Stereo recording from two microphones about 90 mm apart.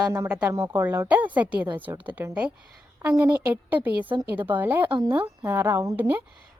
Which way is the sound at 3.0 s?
35° right (ahead or behind).